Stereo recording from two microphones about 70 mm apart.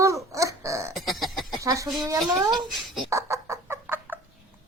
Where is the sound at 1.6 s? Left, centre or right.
Right.